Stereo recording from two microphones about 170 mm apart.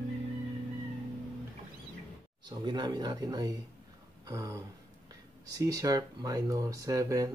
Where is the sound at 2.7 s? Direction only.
25° right (ahead or behind).